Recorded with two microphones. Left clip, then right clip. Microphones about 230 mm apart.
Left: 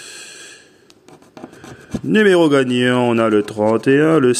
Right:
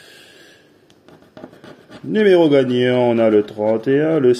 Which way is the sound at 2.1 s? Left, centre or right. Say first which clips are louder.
Even; left.